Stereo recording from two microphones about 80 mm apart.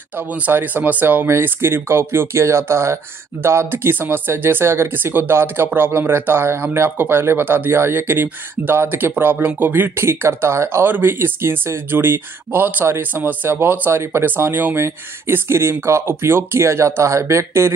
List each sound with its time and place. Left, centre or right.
0.3 s speech: right